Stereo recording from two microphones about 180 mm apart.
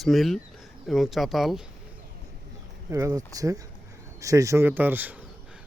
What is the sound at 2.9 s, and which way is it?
Speech, 15° right (ahead or behind).